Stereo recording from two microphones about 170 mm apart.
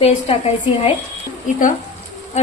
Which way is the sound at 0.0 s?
35° left (ahead or behind).